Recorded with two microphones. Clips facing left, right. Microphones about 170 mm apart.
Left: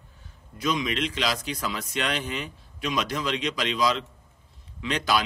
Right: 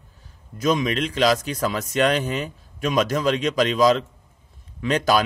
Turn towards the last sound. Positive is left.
turn(degrees=-45)  # may be behind; listen again after turning